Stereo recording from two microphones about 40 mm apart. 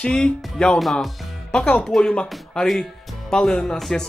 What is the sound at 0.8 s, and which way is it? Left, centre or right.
Speech, centre.